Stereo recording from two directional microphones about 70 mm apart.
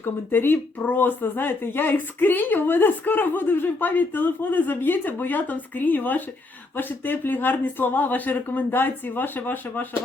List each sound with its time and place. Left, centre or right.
0.0 s speech: left